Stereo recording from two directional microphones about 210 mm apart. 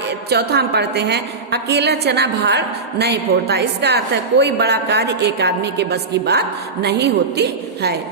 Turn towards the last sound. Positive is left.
turn(degrees=-50)  # may be behind; listen again after turning